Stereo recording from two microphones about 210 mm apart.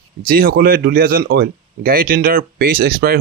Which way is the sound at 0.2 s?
45° right (ahead or behind).